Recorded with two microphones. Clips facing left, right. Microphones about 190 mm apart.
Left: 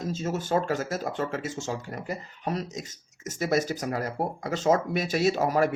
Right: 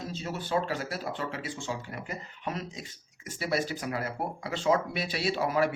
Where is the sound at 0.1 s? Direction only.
45° left (ahead or behind).